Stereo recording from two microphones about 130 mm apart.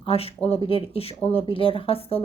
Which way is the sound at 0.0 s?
45° left (ahead or behind).